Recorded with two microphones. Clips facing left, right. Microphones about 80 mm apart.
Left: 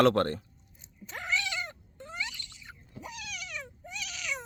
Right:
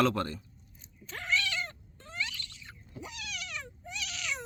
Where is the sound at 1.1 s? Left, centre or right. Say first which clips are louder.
Right 1 dB; centre.